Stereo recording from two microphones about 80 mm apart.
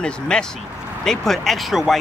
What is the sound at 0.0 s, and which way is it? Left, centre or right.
Speech, centre.